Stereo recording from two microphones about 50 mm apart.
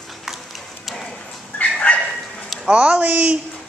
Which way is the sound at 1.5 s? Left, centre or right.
Left.